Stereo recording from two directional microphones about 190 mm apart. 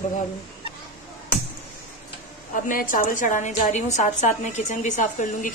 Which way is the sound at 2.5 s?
45° left (ahead or behind).